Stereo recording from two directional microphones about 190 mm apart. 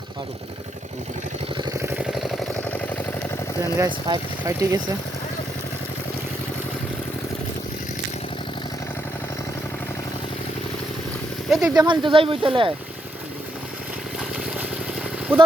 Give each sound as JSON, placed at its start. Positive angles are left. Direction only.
{"t": 1.5, "sound": "vehicle", "side_deg": -20}
{"t": 2.0, "sound": "vehicle", "side_deg": -5}
{"t": 3.8, "sound": "speech", "side_deg": -20}
{"t": 11.4, "sound": "speech", "side_deg": 0}
{"t": 11.7, "sound": "speech", "side_deg": -20}
{"t": 14.2, "sound": "vehicle", "side_deg": -5}
{"t": 15.3, "sound": "speech", "side_deg": -10}